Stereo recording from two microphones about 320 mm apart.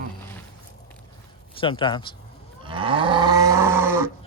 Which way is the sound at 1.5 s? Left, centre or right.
Centre.